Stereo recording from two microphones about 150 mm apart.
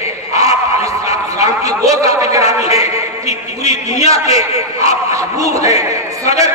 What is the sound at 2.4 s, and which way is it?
Music, 45° left (ahead or behind).